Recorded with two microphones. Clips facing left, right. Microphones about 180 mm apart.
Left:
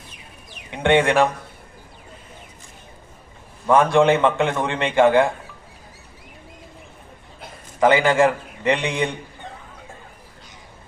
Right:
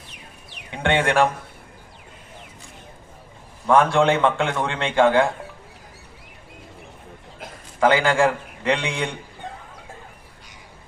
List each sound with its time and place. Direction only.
0.7 s a man's voice: 20° left (ahead or behind)
3.7 s a man's voice: 15° left (ahead or behind)
7.8 s a man's voice: 20° left (ahead or behind)